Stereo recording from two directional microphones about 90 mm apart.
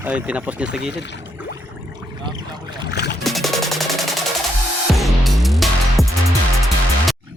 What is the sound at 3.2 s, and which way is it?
Music, centre (ahead or behind).